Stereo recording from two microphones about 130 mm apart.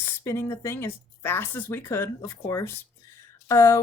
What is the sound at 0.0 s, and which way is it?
Speech, 20° left (ahead or behind).